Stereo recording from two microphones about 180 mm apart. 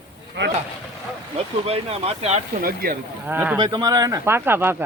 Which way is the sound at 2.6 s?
55° right (ahead or behind).